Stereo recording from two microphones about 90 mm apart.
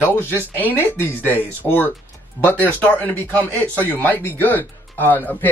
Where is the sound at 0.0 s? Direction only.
20° left (ahead or behind).